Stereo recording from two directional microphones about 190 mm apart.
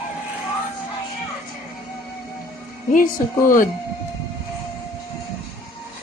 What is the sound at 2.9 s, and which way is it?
Speech, 45° left (ahead or behind).